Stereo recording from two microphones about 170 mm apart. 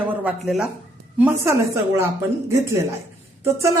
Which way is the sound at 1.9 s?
15° right (ahead or behind).